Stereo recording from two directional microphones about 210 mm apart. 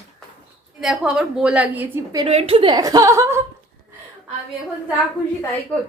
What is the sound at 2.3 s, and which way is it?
A woman's voice, 30° right (ahead or behind).